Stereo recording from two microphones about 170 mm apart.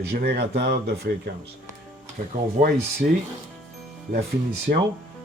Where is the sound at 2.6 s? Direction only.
45° right (ahead or behind).